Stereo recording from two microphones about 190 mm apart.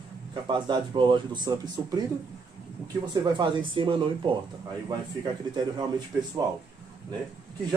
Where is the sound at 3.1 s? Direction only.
20° right (ahead or behind).